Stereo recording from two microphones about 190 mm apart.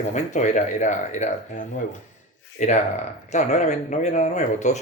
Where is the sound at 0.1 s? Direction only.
40° left (ahead or behind).